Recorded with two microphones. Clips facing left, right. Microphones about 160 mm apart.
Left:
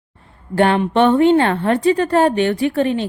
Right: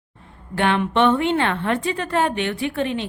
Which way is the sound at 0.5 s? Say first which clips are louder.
Left 5 dB; 40° left (ahead or behind).